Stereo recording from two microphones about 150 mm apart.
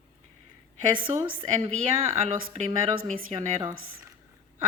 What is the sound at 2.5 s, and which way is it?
Speech, 45° right (ahead or behind).